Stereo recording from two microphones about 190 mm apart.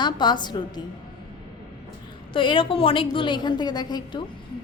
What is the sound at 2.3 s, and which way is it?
A woman's voice, 25° left (ahead or behind).